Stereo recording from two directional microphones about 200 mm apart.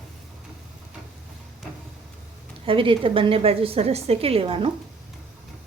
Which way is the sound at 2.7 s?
25° right (ahead or behind).